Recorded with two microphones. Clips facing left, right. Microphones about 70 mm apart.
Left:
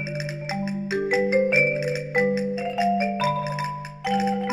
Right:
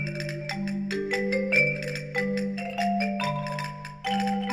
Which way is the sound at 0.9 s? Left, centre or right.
Centre.